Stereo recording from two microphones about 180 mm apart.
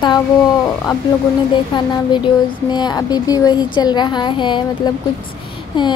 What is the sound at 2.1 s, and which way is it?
Speech, 25° left (ahead or behind).